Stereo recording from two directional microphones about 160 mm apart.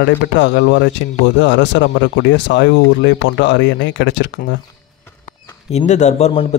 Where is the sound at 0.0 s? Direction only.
90° left.